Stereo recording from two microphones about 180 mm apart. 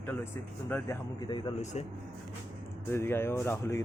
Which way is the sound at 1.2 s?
25° left (ahead or behind).